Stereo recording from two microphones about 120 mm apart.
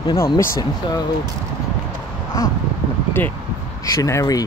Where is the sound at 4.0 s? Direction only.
30° left (ahead or behind).